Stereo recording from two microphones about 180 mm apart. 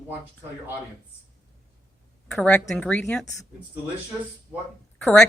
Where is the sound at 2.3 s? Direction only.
5° left (ahead or behind).